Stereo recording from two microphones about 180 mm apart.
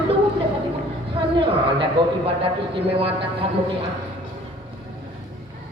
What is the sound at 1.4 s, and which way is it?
A man's voice, 30° right (ahead or behind).